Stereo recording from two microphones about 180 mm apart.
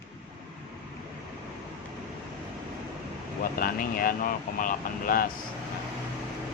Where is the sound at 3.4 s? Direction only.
55° left (ahead or behind).